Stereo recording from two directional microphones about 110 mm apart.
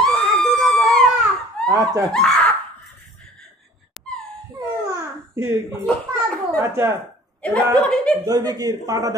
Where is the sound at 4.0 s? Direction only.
Centre (ahead or behind).